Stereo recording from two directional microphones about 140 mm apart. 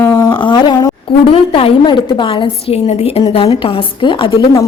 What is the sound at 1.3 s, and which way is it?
A woman's voice, 40° left (ahead or behind).